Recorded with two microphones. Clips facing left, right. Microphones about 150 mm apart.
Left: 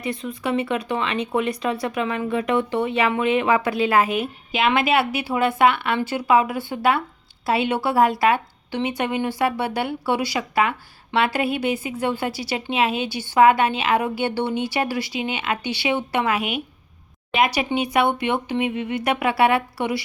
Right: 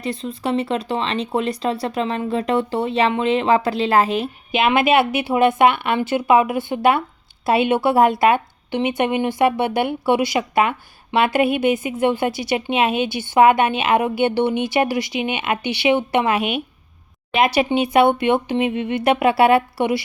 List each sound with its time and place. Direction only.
0.0 s a woman's voice: 30° right (ahead or behind)